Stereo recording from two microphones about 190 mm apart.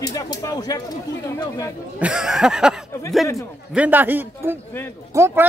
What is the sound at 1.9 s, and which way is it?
A man's voice, 5° right (ahead or behind).